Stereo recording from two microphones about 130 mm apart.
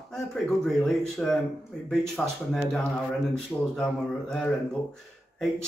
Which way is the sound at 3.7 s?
5° left (ahead or behind).